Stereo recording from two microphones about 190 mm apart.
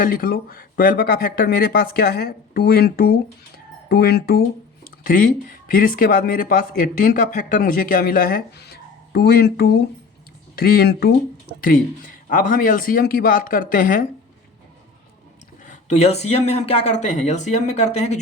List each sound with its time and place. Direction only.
0.0 s speech: 50° left (ahead or behind)
5.0 s speech: 45° left (ahead or behind)
15.6 s speech: 40° left (ahead or behind)